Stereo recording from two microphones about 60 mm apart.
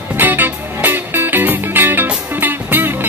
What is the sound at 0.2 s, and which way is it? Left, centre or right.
Music, right.